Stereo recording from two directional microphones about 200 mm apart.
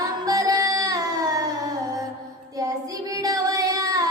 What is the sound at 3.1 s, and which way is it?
Singing, 15° right (ahead or behind).